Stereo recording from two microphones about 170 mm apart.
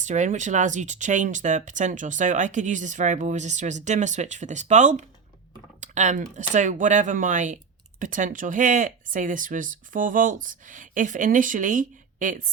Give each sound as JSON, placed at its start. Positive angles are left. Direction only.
{"t": 0.0, "sound": "speech", "side_deg": -45}
{"t": 5.8, "sound": "typing", "side_deg": -45}
{"t": 6.3, "sound": "speech", "side_deg": -45}